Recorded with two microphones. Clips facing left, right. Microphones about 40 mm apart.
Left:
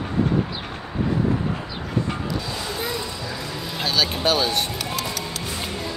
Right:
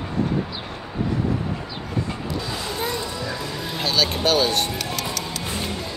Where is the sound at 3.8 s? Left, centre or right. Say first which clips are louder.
Right 1 dB; centre.